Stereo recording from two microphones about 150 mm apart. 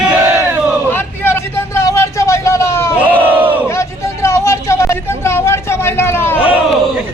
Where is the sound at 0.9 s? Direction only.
15° left (ahead or behind).